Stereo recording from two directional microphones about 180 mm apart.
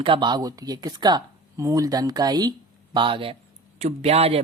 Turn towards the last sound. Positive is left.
turn(degrees=-35)  # may be behind; listen again after turning